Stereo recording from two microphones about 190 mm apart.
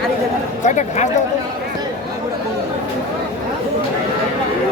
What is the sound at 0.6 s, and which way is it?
Speech, 40° left (ahead or behind).